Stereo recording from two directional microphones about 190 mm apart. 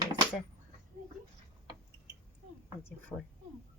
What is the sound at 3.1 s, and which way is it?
Speech, 15° left (ahead or behind).